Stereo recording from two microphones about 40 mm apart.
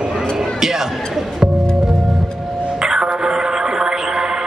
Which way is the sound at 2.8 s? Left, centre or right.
Centre.